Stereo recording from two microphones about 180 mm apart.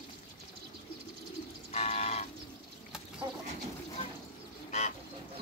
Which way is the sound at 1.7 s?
35° left (ahead or behind).